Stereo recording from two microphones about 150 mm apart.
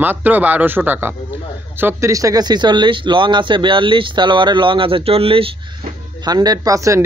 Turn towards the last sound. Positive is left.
turn(degrees=-20)  # may be behind; listen again after turning